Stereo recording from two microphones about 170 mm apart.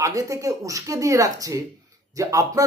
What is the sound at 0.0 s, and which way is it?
Speech, 20° right (ahead or behind).